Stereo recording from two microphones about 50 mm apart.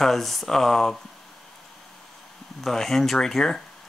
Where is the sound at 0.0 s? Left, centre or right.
Centre.